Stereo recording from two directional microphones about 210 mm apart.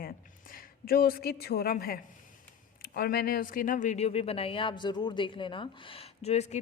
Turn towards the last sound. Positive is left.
turn(degrees=30)  # may be behind; listen again after turning